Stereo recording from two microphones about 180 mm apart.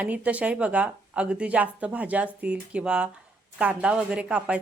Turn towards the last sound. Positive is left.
turn(degrees=-5)  # may be behind; listen again after turning